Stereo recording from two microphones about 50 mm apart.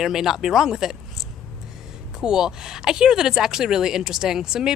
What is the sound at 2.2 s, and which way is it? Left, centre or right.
Speech, centre.